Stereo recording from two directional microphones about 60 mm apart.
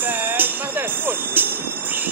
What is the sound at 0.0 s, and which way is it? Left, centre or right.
Train, right.